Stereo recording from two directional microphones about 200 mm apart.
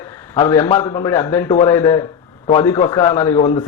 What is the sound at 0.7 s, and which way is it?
Speech, 25° left (ahead or behind).